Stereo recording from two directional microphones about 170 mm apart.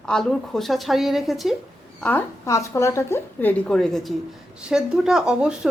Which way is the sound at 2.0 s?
10° left (ahead or behind).